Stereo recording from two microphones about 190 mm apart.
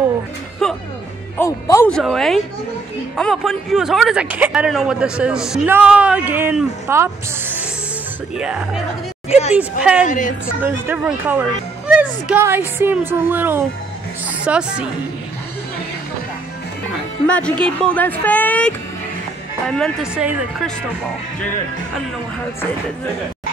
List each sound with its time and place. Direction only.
0.6 s music: 5° left (ahead or behind)
1.4 s speech: 15° left (ahead or behind)
2.0 s speech: centre (ahead or behind)
9.6 s speech: 5° right (ahead or behind)
10.0 s a woman's voice: 40° left (ahead or behind)
10.6 s speech: 10° right (ahead or behind)
17.3 s speech: 5° left (ahead or behind)